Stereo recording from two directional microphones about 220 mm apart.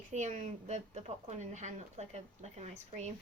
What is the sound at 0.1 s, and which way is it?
A woman's voice, 30° right (ahead or behind).